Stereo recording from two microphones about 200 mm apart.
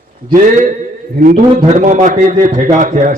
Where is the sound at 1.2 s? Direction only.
40° right (ahead or behind).